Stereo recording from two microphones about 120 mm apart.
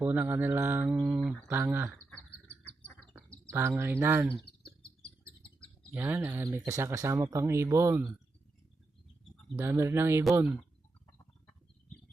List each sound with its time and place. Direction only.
0.0 s mantra: 20° right (ahead or behind)
3.2 s speech: 15° right (ahead or behind)
5.9 s speech: 20° right (ahead or behind)
9.6 s speech: 20° right (ahead or behind)